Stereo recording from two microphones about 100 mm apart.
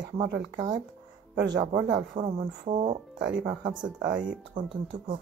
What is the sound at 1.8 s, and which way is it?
Speech, 55° right (ahead or behind).